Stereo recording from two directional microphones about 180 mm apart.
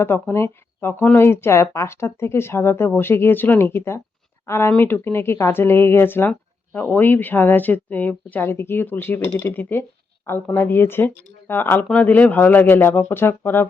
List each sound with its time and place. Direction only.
0.0 s speech: 15° left (ahead or behind)